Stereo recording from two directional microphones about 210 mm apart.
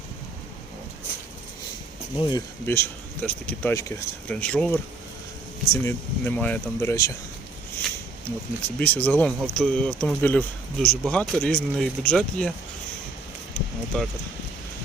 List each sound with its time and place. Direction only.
2.1 s speech: 20° left (ahead or behind)
8.6 s speech: 10° left (ahead or behind)
13.5 s a sound: 5° left (ahead or behind)